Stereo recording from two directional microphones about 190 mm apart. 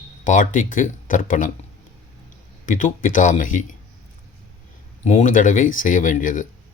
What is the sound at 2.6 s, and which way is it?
Speech, 40° left (ahead or behind).